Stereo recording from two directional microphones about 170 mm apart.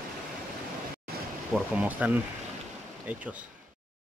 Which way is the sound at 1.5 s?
10° right (ahead or behind).